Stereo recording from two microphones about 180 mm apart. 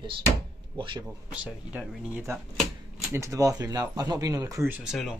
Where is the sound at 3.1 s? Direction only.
15° right (ahead or behind).